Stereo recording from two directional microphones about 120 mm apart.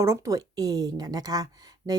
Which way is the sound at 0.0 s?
25° right (ahead or behind).